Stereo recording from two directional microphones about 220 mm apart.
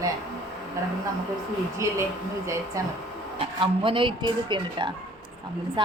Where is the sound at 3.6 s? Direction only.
25° right (ahead or behind).